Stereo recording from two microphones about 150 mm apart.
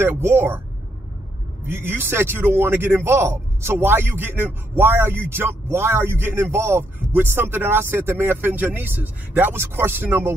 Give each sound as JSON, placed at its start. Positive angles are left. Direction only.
{"t": 0.0, "sound": "a man's voice", "side_deg": -15}
{"t": 1.7, "sound": "a man's voice", "side_deg": -15}